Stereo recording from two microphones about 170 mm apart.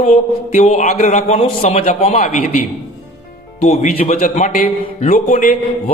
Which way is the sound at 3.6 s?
40° left (ahead or behind).